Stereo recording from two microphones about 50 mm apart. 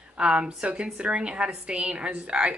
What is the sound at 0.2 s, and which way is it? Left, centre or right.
A woman's voice, right.